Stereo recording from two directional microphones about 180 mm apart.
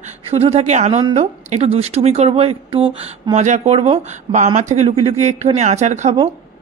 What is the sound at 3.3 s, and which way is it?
Speech, 40° right (ahead or behind).